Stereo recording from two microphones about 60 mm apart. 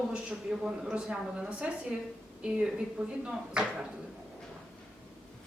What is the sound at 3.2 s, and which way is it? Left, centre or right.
Speech, centre.